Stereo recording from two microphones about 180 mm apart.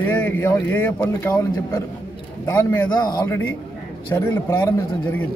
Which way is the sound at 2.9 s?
20° left (ahead or behind).